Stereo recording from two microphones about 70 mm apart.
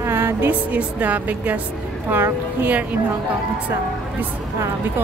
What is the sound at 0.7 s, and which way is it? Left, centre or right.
Speech, right.